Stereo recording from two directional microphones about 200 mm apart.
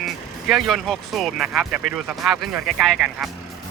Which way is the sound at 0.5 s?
Centre (ahead or behind).